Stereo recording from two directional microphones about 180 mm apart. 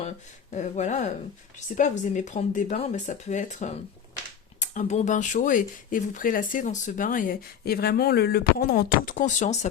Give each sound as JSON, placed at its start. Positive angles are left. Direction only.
{"t": 0.5, "sound": "speech", "side_deg": 40}